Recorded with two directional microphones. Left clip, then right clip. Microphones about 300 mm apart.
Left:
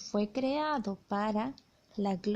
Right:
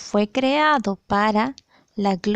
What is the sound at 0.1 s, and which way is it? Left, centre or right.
A woman's voice, right.